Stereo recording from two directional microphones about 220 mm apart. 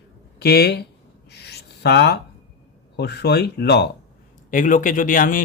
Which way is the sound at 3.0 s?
50° left (ahead or behind).